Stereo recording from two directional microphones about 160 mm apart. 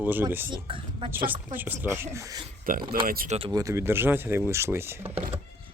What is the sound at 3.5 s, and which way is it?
Speech, 20° right (ahead or behind).